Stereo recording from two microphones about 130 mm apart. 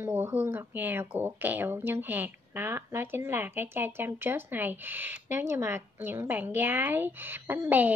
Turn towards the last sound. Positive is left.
turn(degrees=-15)  # may be behind; listen again after turning